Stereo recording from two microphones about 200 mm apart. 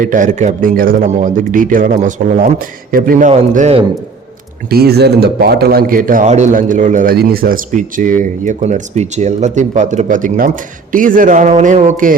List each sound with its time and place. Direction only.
0.0 s a man's voice: 40° right (ahead or behind)
4.7 s a man's voice: 50° right (ahead or behind)